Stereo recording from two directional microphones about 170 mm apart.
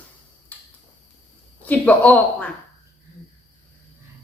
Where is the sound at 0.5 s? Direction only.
10° left (ahead or behind).